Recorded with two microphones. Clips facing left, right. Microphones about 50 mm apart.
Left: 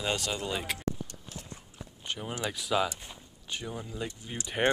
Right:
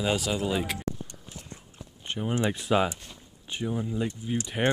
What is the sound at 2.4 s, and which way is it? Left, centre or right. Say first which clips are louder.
Speech: right 5 dB; right.